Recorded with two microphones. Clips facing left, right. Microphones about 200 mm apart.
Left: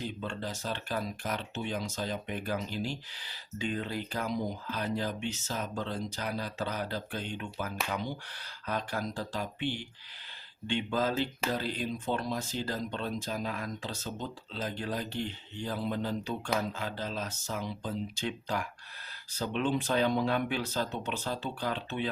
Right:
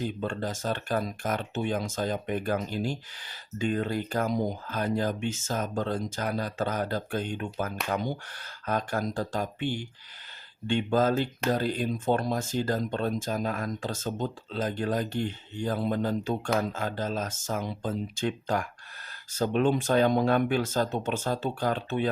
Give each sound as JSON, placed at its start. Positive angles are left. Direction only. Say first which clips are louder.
{"t": 0.0, "sound": "speech", "louder": "right 6 dB", "side_deg": -50}